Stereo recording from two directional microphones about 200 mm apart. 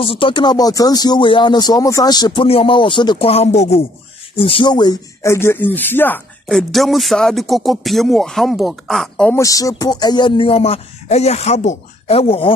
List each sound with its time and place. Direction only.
0.0 s speech: 25° left (ahead or behind); by 9.4 s 5° left (ahead or behind)
9.4 s speech: 15° left (ahead or behind)